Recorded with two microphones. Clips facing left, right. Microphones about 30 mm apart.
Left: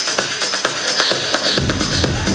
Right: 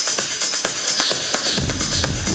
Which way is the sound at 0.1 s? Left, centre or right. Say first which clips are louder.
Left 4 dB; left.